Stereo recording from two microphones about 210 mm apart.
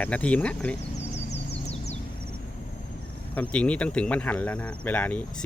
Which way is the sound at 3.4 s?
5° left (ahead or behind).